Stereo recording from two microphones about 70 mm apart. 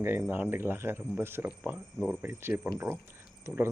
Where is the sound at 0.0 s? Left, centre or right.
Right.